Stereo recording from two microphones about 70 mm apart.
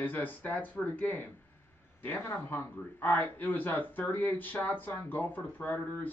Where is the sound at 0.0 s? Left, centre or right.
Left.